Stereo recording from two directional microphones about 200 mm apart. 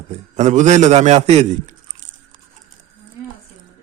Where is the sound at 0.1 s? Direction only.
35° right (ahead or behind).